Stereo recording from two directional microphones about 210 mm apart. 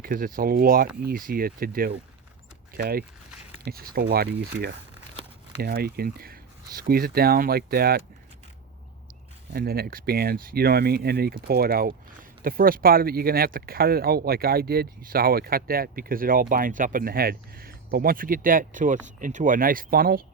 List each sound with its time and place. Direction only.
0.0 s speech: 40° right (ahead or behind)
9.5 s speech: 45° right (ahead or behind)